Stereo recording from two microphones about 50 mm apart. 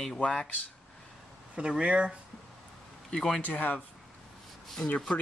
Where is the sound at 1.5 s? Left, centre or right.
Right.